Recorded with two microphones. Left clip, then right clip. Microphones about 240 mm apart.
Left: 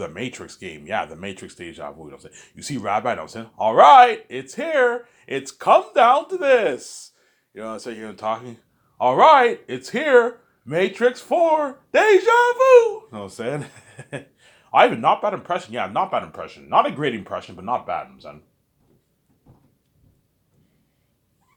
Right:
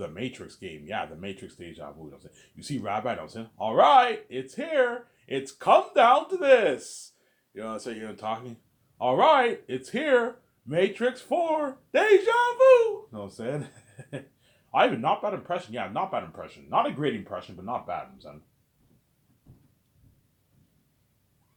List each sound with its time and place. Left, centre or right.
0.0 s speech: left